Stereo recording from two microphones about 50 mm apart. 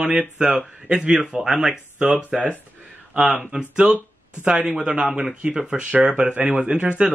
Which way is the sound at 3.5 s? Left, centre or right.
Right.